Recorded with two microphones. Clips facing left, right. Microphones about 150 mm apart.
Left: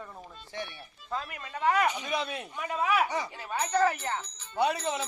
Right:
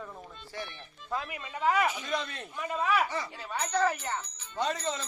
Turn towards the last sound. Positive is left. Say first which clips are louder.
# left 4 dB
turn(degrees=10)  # may be behind; listen again after turning